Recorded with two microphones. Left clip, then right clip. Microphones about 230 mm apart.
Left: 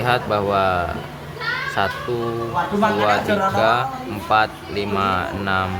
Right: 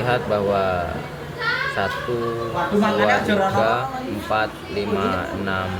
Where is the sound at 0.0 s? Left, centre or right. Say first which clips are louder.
Left 1 dB; left.